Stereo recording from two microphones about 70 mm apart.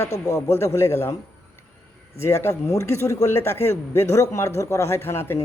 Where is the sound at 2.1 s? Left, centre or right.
Left.